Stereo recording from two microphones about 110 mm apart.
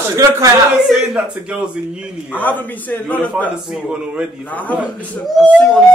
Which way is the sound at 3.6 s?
10° right (ahead or behind).